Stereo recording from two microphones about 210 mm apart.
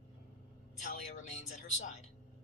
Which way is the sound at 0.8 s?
35° left (ahead or behind).